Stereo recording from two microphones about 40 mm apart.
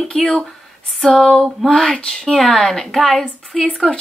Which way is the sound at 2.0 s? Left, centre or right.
Centre.